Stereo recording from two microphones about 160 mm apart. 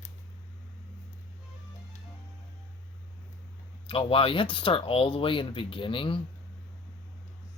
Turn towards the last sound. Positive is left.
turn(degrees=30)  # may be behind; listen again after turning